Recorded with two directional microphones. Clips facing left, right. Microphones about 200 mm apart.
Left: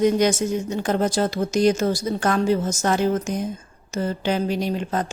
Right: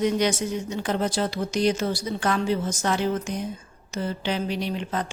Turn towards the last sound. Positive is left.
turn(degrees=45)  # may be behind; listen again after turning